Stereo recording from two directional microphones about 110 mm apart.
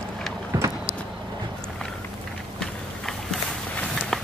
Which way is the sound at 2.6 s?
5° left (ahead or behind).